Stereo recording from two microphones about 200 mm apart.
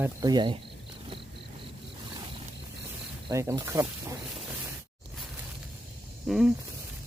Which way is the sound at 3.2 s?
15° right (ahead or behind).